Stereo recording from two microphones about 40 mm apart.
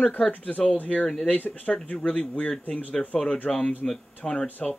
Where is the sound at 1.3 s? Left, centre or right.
Left.